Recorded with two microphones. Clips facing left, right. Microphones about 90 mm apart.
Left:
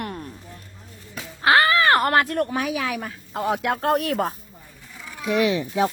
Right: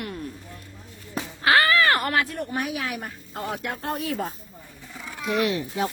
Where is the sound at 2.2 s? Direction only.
75° left (ahead or behind).